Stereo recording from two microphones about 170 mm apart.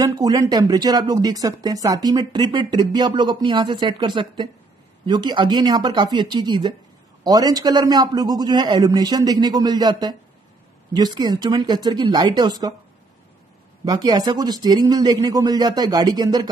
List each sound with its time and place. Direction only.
0.0 s speech: 20° right (ahead or behind)
13.8 s speech: 25° right (ahead or behind)